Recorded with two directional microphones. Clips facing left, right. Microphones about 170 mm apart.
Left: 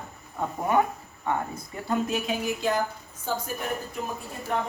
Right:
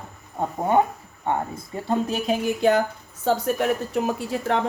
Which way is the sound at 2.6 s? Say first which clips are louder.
Right 7 dB; 65° right (ahead or behind).